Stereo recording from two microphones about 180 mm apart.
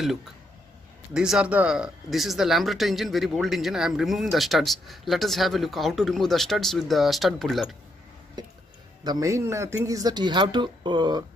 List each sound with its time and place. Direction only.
1.1 s speech: 5° right (ahead or behind)
9.0 s speech: 20° right (ahead or behind)